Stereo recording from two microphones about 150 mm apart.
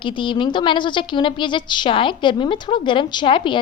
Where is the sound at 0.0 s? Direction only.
35° left (ahead or behind).